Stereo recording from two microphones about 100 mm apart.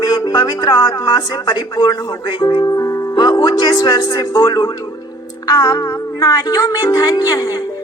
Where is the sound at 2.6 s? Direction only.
35° left (ahead or behind).